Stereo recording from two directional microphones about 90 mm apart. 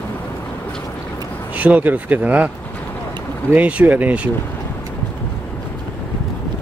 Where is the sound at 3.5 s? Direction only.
15° right (ahead or behind).